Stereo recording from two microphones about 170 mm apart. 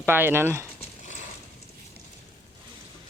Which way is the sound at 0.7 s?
45° left (ahead or behind).